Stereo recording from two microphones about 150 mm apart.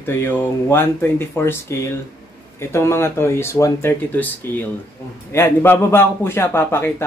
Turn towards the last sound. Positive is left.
turn(degrees=15)  # may be behind; listen again after turning